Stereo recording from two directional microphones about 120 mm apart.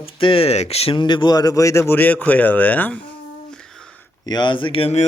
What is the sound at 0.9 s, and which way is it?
Speech, 40° left (ahead or behind).